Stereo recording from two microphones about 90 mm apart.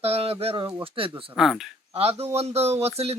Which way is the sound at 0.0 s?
90° right.